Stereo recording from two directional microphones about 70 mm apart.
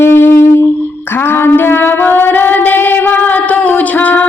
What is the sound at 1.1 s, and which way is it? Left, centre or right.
Female singing, left.